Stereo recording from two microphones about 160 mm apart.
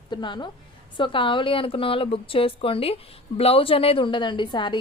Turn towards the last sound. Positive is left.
turn(degrees=30)  # may be behind; listen again after turning